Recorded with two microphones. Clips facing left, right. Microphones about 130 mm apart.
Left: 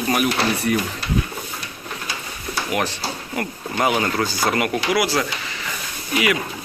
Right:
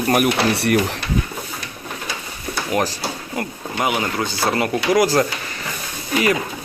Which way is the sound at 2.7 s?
35° right (ahead or behind).